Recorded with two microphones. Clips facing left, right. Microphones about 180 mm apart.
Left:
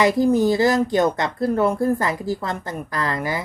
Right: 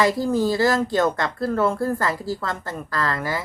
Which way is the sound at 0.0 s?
20° left (ahead or behind).